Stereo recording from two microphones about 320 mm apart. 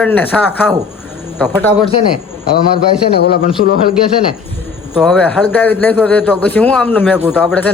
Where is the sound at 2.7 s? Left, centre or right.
Left.